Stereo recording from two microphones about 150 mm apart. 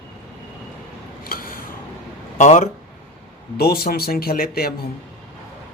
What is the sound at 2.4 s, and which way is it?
Speech, 55° left (ahead or behind).